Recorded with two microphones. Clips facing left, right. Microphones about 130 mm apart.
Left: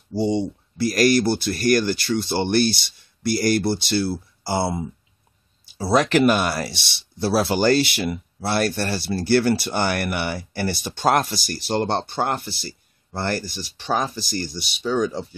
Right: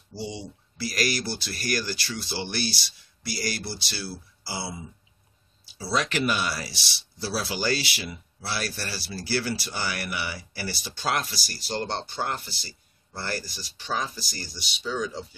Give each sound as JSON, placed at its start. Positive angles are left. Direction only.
{"t": 0.2, "sound": "speech", "side_deg": 50}